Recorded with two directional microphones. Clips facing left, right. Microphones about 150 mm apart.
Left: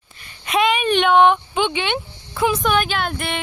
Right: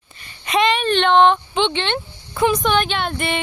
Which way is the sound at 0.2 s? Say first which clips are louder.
Right 1 dB; centre (ahead or behind).